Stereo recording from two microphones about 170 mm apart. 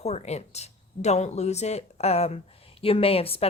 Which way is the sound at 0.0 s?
40° left (ahead or behind).